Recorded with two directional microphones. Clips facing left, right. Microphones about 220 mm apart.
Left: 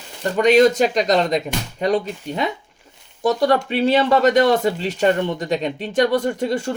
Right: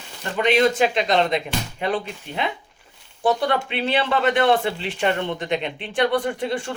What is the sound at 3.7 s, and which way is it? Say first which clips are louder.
Speech: left 6 dB; 40° left (ahead or behind).